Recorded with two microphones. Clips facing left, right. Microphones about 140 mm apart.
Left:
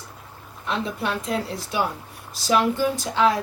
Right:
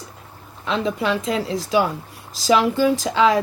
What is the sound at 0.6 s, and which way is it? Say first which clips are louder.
Speech: right 5 dB; 90° right.